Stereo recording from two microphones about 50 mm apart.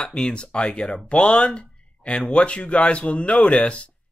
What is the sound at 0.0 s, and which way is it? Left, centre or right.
Speech, centre.